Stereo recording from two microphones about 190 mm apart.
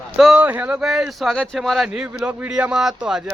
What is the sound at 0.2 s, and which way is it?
A man's voice, 5° right (ahead or behind).